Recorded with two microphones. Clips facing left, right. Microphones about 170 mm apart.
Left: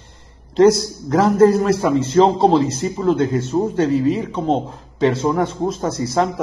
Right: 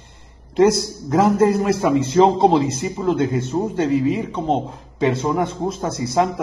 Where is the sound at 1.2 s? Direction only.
15° right (ahead or behind).